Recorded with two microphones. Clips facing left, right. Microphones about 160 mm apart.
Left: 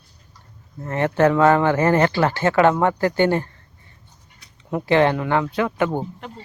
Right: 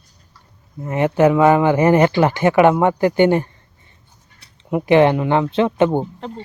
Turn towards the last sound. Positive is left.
turn(degrees=-25)  # may be behind; listen again after turning